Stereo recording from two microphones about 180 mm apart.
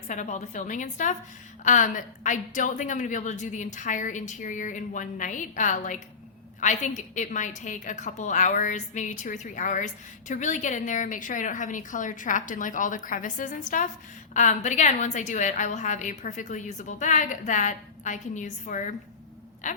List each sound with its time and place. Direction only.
0.1 s a woman's voice: 40° left (ahead or behind)